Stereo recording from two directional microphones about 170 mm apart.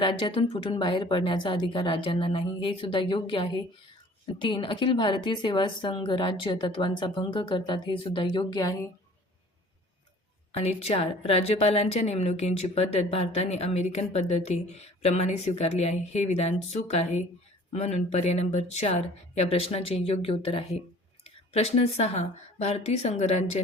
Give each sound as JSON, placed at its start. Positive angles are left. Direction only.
{"t": 0.0, "sound": "a woman's voice", "side_deg": 30}
{"t": 10.5, "sound": "a woman's voice", "side_deg": 35}